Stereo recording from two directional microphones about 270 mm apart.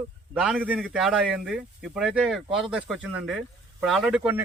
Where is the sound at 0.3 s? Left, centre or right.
Centre.